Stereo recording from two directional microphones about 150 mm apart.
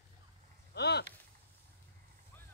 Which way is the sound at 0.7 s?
90° left.